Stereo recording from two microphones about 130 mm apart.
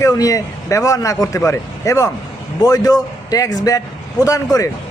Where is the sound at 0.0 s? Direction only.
25° left (ahead or behind).